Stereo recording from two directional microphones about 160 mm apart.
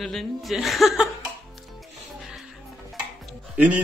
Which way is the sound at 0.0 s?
Centre (ahead or behind).